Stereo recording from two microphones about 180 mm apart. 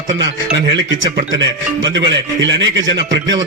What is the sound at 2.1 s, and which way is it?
Speech, 90° right.